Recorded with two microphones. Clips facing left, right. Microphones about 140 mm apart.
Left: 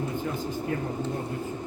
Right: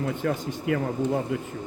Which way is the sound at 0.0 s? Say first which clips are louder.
Right 3 dB; 75° right (ahead or behind).